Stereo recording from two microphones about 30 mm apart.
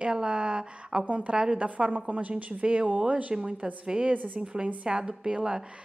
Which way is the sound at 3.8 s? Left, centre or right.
Right.